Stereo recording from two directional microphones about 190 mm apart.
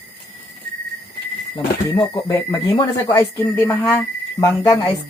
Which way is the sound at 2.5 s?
15° left (ahead or behind).